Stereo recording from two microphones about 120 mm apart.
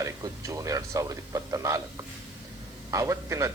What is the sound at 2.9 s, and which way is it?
Speech, 25° right (ahead or behind).